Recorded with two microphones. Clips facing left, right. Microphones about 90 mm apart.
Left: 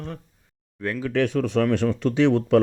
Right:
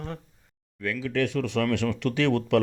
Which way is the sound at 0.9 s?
50° left (ahead or behind).